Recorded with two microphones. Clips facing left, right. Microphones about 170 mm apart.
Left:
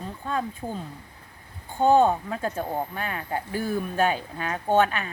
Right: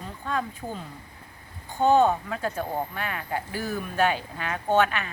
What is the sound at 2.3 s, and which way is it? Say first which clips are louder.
A woman's voice: left 1 dB; 25° left (ahead or behind).